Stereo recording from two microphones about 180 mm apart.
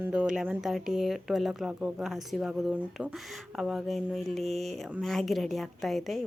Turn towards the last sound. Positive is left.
turn(degrees=0)  # may be behind; listen again after turning